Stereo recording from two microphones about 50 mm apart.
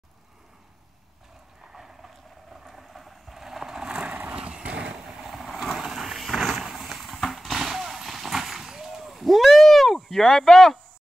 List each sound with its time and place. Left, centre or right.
1.7 s vehicle: centre
2.5 s a sound: centre
4.3 s vehicle: right
5.0 s vehicle: centre